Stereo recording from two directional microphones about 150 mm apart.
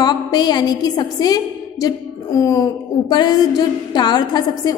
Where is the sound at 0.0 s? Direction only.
30° left (ahead or behind).